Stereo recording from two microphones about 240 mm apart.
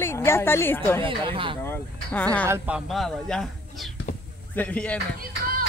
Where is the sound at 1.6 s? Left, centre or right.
Centre.